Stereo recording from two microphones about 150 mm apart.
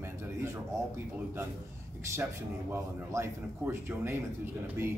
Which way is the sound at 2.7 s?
15° right (ahead or behind).